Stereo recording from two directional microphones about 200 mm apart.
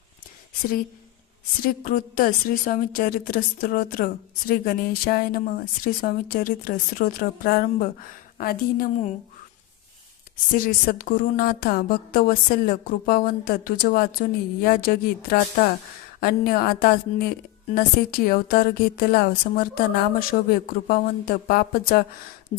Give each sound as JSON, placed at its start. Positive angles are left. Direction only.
{"t": 1.6, "sound": "a woman's voice", "side_deg": 45}
{"t": 10.5, "sound": "a woman's voice", "side_deg": 45}